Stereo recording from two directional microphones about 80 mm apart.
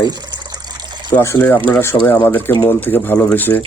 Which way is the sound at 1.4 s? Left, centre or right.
Left.